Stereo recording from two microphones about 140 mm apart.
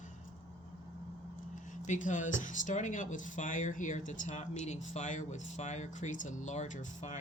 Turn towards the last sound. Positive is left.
turn(degrees=60)  # may be behind; listen again after turning